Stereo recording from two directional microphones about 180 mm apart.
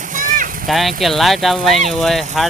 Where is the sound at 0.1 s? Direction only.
45° right (ahead or behind).